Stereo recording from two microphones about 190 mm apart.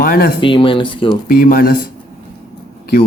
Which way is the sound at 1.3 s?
50° left (ahead or behind).